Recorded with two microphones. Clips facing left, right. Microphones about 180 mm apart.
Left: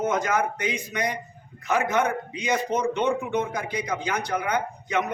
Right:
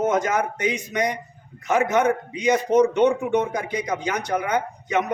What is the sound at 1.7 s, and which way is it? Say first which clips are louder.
Speech: right 3 dB; 20° right (ahead or behind).